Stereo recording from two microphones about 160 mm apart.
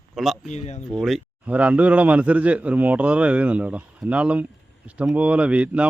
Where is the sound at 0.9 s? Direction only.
Centre (ahead or behind).